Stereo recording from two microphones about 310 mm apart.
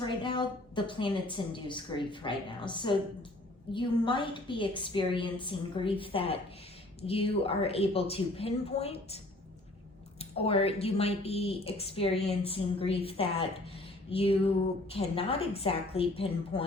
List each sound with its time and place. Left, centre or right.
0.2 s a woman's voice: centre